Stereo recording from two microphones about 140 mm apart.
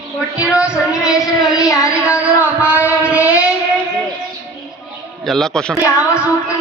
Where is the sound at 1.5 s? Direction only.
25° left (ahead or behind).